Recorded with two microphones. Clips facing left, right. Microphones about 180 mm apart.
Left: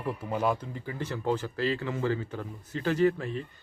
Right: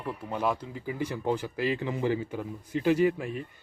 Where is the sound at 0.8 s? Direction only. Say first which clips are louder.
Right 2 dB; 10° right (ahead or behind).